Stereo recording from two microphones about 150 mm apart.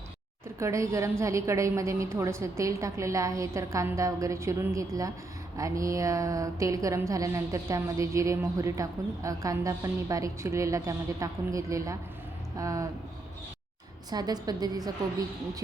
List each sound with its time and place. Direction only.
0.4 s a woman's voice: 20° right (ahead or behind)
14.1 s a woman's voice: 25° right (ahead or behind)